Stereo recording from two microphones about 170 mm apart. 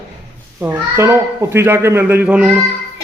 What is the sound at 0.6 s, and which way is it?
Speech, 15° right (ahead or behind).